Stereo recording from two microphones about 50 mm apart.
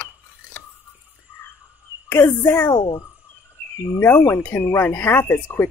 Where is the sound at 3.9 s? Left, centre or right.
Left.